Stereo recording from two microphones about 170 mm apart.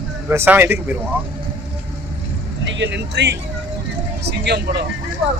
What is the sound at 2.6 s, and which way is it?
A man's voice, 90° right.